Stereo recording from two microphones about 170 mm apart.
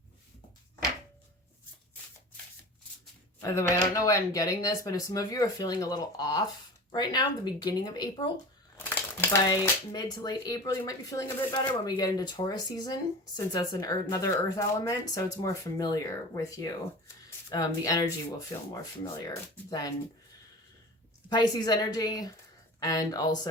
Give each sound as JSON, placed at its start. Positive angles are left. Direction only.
{"t": 3.4, "sound": "speech", "side_deg": 20}
{"t": 21.2, "sound": "speech", "side_deg": 25}